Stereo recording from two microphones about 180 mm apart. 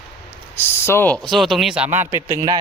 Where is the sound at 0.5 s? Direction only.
15° left (ahead or behind).